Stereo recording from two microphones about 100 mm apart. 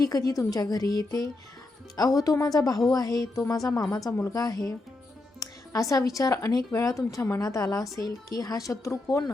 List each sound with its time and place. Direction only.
0.0 s speech: 35° left (ahead or behind)